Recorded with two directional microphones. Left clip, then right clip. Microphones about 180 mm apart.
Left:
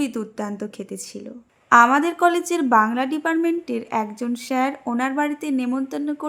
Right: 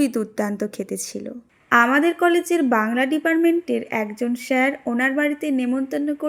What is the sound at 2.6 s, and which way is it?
Speech, 5° right (ahead or behind).